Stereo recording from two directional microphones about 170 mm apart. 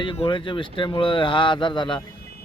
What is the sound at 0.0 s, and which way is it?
A man's voice, 30° left (ahead or behind).